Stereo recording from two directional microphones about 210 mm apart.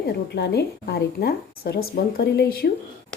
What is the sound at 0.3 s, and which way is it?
Speech, 50° left (ahead or behind).